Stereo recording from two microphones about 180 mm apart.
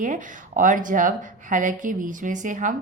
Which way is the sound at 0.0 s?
45° right (ahead or behind).